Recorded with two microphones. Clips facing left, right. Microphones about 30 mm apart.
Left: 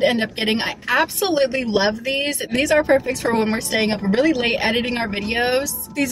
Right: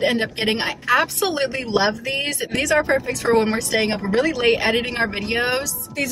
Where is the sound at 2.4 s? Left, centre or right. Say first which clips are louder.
Left 2 dB; left.